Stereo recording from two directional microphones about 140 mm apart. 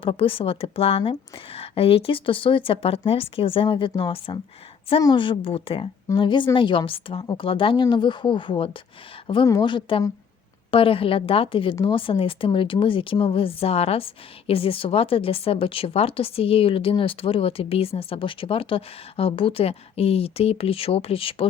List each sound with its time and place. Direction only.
0.0 s speech: 40° left (ahead or behind)